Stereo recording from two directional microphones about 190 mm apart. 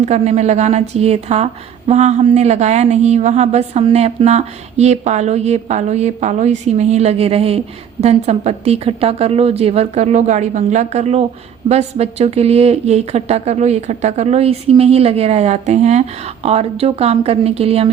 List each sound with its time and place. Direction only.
0.0 s a woman's voice: 35° right (ahead or behind)